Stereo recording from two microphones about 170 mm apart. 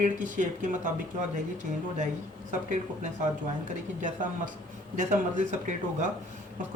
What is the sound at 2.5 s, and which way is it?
Speech, 45° right (ahead or behind).